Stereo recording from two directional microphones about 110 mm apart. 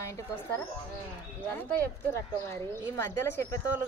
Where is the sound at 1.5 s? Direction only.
20° left (ahead or behind).